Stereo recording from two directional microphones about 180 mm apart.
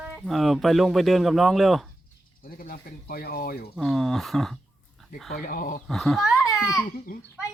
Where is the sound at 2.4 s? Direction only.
55° left (ahead or behind).